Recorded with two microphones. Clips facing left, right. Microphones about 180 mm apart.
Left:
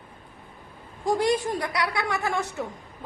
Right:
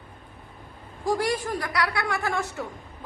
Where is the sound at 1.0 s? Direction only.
20° left (ahead or behind).